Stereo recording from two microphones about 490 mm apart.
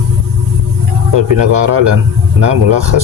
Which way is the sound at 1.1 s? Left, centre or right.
Right.